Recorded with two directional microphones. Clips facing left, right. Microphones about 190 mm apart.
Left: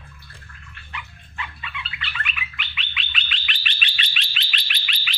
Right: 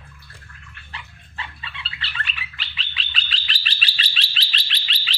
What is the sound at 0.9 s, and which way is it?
Dog, 30° right (ahead or behind).